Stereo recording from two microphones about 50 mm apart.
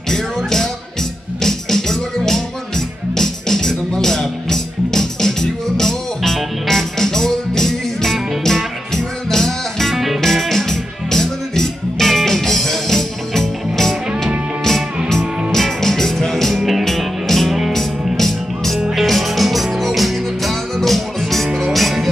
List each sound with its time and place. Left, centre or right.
0.1 s music: centre
21.5 s music: centre
21.7 s music: centre